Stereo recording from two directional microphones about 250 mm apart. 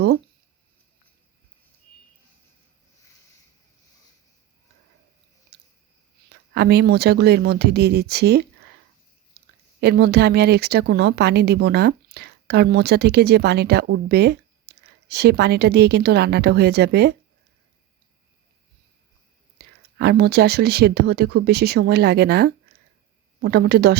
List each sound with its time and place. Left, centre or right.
6.5 s speech: right
9.8 s speech: right
19.5 s speech: right